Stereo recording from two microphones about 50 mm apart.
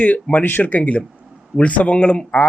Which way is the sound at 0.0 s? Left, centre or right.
Left.